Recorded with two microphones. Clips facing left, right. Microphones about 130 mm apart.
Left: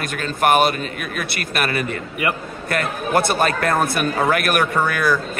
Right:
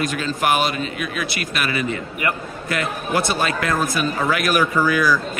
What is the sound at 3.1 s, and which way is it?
A man's voice, 55° left (ahead or behind).